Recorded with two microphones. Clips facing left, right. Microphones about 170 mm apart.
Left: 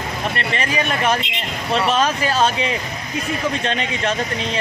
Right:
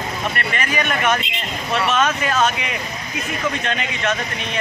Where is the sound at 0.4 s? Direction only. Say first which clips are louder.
Left 2 dB; 30° left (ahead or behind).